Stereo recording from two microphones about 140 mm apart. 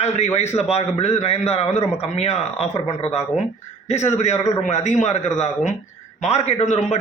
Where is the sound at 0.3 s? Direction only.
50° left (ahead or behind).